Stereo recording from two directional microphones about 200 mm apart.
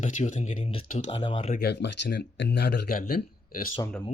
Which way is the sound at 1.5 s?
55° left (ahead or behind).